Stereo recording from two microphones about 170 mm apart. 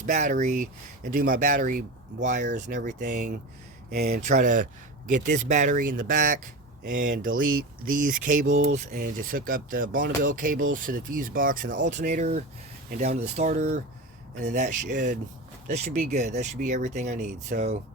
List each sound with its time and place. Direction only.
0.0 s speech: 45° right (ahead or behind)
3.8 s speech: 65° right (ahead or behind)
4.2 s speech: 50° right (ahead or behind)